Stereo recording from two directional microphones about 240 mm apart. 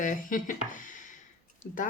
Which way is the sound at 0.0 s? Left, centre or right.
Left.